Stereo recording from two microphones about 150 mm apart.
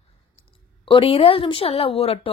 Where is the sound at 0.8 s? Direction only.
35° left (ahead or behind).